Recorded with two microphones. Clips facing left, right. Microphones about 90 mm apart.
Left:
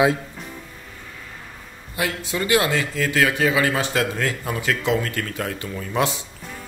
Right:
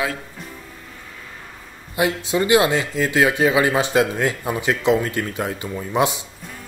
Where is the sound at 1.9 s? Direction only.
20° right (ahead or behind).